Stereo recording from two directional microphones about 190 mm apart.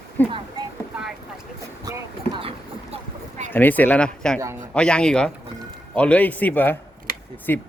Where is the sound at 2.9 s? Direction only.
35° right (ahead or behind).